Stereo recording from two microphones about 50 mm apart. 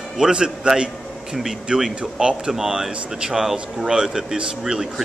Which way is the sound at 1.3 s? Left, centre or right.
Centre.